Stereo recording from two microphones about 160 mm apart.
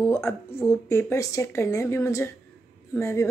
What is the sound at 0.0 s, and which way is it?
Speech, 15° left (ahead or behind).